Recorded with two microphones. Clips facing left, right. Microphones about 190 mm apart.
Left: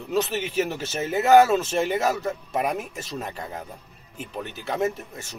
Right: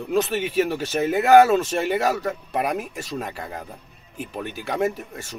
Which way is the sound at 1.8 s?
5° right (ahead or behind).